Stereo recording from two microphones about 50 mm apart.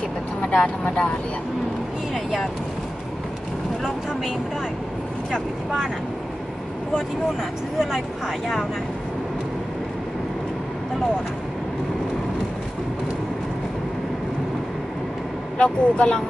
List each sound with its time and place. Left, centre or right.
0.5 s speech: centre
15.5 s speech: left